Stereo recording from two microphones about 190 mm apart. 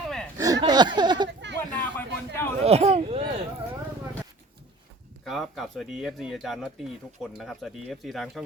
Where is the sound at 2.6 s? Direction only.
35° right (ahead or behind).